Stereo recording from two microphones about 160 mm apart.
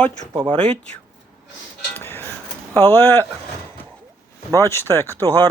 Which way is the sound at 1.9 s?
15° left (ahead or behind).